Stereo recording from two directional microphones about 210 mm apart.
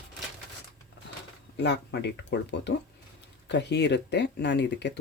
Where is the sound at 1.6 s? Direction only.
55° left (ahead or behind).